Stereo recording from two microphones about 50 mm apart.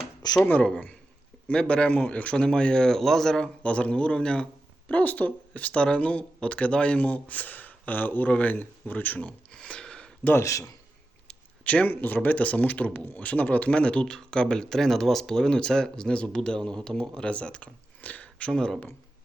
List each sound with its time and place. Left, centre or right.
0.4 s speech: left
3.6 s speech: left
4.9 s speech: left
11.6 s speech: left
18.5 s speech: centre